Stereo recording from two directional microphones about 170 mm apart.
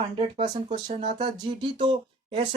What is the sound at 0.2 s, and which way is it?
Speech, 35° right (ahead or behind).